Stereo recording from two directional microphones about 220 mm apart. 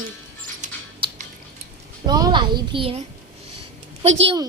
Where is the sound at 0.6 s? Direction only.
35° right (ahead or behind).